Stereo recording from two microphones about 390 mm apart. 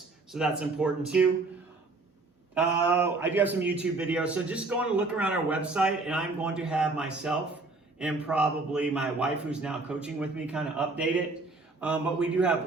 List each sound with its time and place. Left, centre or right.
0.3 s a man's voice: centre
2.6 s a man's voice: centre